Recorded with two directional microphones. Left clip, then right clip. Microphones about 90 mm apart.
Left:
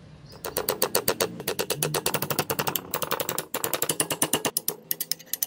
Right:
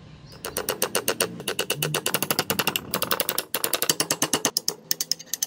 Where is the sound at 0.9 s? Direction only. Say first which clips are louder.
Right 1 dB; 40° left (ahead or behind).